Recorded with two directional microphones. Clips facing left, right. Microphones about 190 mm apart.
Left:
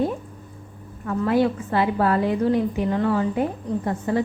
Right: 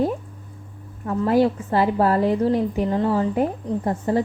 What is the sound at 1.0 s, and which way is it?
A woman's voice, 35° right (ahead or behind).